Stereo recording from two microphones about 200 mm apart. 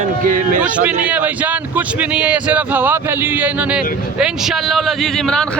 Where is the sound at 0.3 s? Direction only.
40° right (ahead or behind).